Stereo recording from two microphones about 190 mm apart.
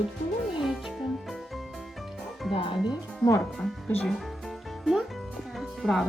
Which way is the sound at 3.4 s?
Centre (ahead or behind).